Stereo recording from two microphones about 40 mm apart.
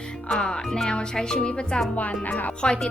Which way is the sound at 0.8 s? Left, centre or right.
Left.